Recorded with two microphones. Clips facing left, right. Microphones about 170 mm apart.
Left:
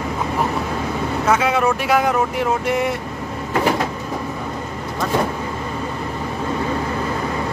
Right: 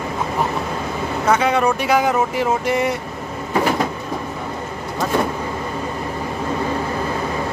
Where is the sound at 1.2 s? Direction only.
Centre (ahead or behind).